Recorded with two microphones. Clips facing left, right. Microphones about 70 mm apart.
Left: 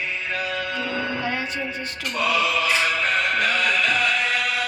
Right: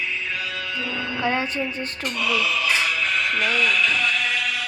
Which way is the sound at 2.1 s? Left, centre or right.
Left.